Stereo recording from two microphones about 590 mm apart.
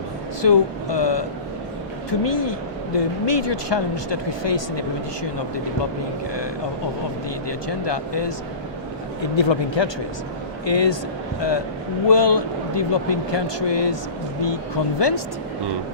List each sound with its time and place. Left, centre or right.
0.4 s speech: left
7.4 s speech: left
9.3 s speech: left
12.0 s speech: left